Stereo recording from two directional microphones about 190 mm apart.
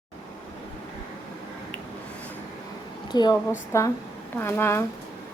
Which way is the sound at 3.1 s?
20° left (ahead or behind).